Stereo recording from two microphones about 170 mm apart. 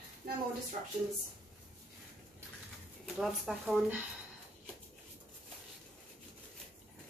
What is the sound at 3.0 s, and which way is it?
Speech, centre (ahead or behind).